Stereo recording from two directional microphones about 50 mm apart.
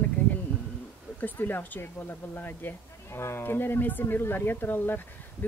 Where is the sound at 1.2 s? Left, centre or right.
Left.